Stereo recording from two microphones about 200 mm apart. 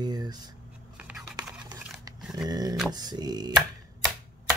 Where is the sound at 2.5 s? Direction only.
20° right (ahead or behind).